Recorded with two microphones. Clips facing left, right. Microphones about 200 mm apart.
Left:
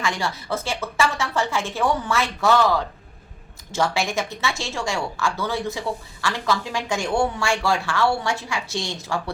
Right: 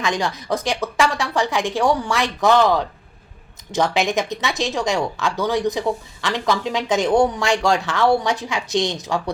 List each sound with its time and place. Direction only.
0.0 s speech: 15° right (ahead or behind)